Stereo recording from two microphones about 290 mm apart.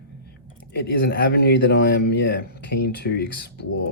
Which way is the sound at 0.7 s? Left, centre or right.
Left.